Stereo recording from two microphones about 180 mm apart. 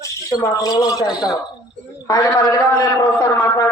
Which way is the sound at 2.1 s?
25° left (ahead or behind).